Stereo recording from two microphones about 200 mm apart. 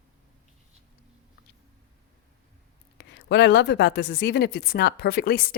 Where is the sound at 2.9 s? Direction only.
60° left (ahead or behind).